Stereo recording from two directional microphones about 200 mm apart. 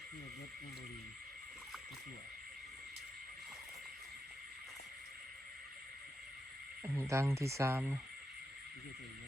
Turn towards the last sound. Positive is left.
turn(degrees=-10)  # may be behind; listen again after turning